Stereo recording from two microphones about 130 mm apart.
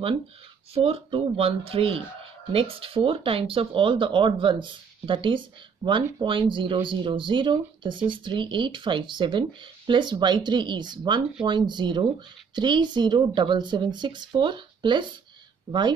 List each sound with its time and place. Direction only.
0.7 s speech: 45° right (ahead or behind)